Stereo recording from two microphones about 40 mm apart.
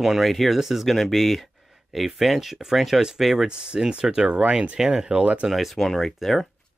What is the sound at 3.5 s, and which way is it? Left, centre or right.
Speech, right.